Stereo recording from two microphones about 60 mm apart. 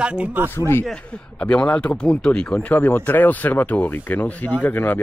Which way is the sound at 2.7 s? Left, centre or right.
Left.